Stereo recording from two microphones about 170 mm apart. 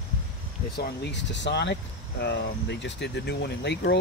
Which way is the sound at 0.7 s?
75° left (ahead or behind).